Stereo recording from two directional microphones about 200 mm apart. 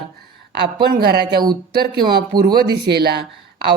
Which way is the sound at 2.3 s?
20° right (ahead or behind).